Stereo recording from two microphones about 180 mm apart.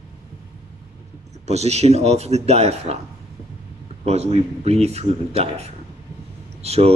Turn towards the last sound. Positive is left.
turn(degrees=-35)  # may be behind; listen again after turning